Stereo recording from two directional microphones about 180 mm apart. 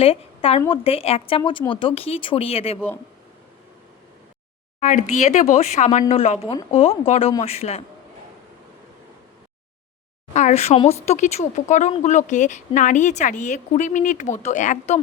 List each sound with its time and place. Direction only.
0.0 s a woman's voice: 30° left (ahead or behind)
4.8 s speech: 45° left (ahead or behind)
10.3 s speech: 40° left (ahead or behind)